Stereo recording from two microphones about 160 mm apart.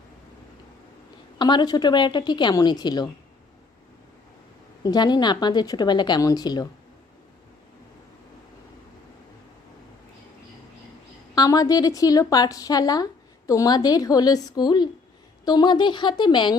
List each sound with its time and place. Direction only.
1.4 s a woman's voice: 25° left (ahead or behind)
4.8 s a woman's voice: 25° left (ahead or behind)
11.3 s a woman's voice: 25° left (ahead or behind)